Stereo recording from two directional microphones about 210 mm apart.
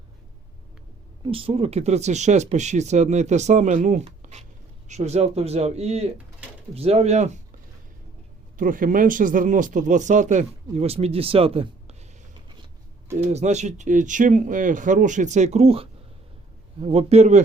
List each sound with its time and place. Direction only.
1.2 s speech: 25° right (ahead or behind)
8.5 s speech: 40° right (ahead or behind)
13.1 s speech: 30° right (ahead or behind)